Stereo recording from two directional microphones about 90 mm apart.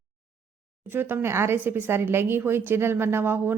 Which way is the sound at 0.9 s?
25° right (ahead or behind).